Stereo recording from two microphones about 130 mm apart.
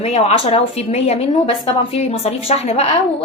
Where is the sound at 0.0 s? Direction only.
55° left (ahead or behind).